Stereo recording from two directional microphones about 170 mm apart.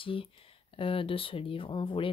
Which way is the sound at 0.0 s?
30° left (ahead or behind).